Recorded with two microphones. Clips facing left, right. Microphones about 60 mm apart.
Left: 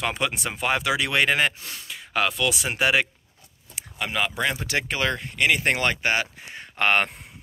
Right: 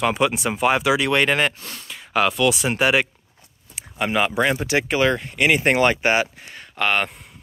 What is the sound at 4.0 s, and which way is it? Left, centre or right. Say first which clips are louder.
Speech: right 6 dB; right.